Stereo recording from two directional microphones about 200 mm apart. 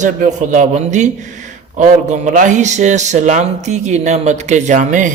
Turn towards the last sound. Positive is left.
turn(degrees=-40)  # may be behind; listen again after turning